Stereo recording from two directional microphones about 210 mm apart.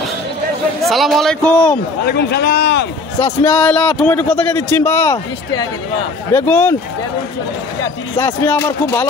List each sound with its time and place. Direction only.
0.8 s a man's voice: centre (ahead or behind)
2.0 s speech: 50° left (ahead or behind)
3.4 s a man's voice: 5° left (ahead or behind)
8.2 s a man's voice: 10° left (ahead or behind)